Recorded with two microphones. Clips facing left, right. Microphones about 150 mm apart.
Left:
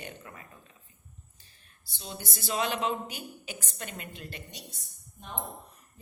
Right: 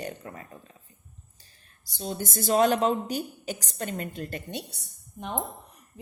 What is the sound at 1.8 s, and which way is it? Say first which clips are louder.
A woman's voice: right 9 dB; 40° right (ahead or behind).